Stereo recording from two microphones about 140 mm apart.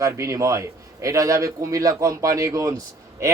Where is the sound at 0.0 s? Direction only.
20° right (ahead or behind).